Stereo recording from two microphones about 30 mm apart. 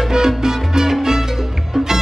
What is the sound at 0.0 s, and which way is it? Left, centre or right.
Salsa music, centre.